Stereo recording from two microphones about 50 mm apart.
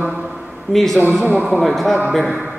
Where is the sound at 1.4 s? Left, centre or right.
Centre.